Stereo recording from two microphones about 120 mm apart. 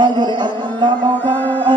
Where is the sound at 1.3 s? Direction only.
15° left (ahead or behind).